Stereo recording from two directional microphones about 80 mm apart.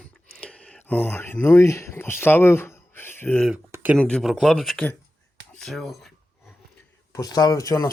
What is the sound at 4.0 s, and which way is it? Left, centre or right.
Speech, centre.